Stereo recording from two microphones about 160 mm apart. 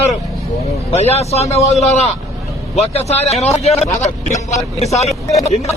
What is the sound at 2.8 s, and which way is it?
A man's voice, 40° left (ahead or behind).